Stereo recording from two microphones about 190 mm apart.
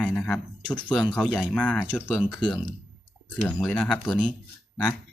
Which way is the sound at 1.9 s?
5° right (ahead or behind).